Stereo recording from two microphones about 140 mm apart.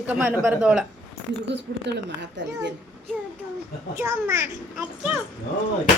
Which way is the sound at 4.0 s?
20° right (ahead or behind).